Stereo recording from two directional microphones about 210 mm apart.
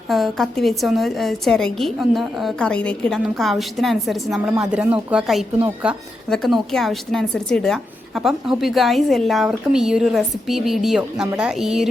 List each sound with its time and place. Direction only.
0.1 s a woman's voice: centre (ahead or behind)